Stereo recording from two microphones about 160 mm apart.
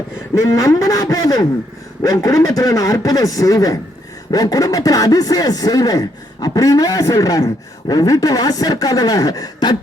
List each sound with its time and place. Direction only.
0.3 s speech: 20° left (ahead or behind)